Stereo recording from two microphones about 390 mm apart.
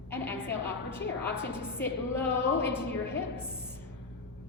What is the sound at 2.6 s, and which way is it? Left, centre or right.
Speech, centre.